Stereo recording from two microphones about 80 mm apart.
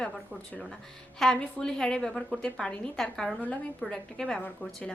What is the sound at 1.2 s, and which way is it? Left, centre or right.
A woman's voice, centre.